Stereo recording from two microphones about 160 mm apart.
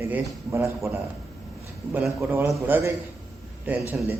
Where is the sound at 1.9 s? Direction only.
10° right (ahead or behind).